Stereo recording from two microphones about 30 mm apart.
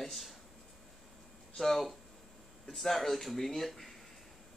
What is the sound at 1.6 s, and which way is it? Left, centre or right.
Speech, centre.